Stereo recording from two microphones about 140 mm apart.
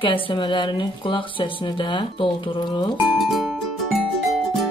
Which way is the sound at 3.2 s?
Centre (ahead or behind).